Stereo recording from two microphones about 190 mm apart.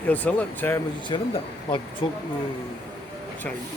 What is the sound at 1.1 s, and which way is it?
Speech, 25° left (ahead or behind).